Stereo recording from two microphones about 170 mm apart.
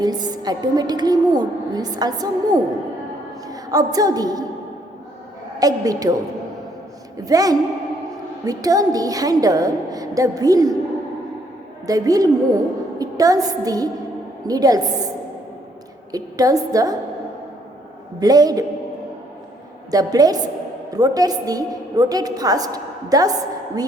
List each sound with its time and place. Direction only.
0.0 s a woman's voice: 25° right (ahead or behind)
5.5 s a woman's voice: 20° right (ahead or behind)
7.3 s a woman's voice: 20° right (ahead or behind)
11.9 s a woman's voice: 20° right (ahead or behind)
16.1 s a woman's voice: 20° right (ahead or behind)
18.2 s a woman's voice: 20° right (ahead or behind)
19.9 s a woman's voice: 20° right (ahead or behind)